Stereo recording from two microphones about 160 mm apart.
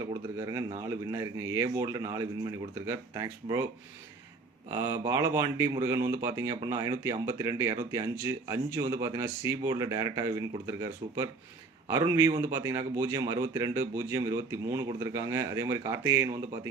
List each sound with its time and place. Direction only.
0.3 s a man's voice: 20° right (ahead or behind)
4.7 s a man's voice: 20° right (ahead or behind)